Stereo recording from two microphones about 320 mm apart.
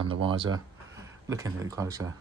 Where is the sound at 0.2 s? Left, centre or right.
Centre.